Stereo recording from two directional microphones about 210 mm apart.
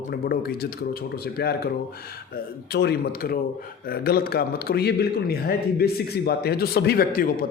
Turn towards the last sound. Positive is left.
turn(degrees=45)  # may be behind; listen again after turning